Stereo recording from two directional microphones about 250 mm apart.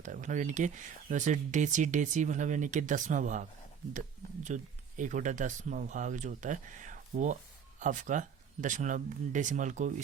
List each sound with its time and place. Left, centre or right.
0.0 s speech: right
4.4 s speech: right